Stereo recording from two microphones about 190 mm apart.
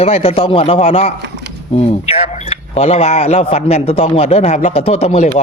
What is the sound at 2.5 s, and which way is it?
Speech, 35° left (ahead or behind).